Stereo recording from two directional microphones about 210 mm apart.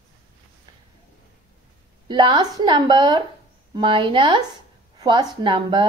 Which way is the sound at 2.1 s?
20° right (ahead or behind).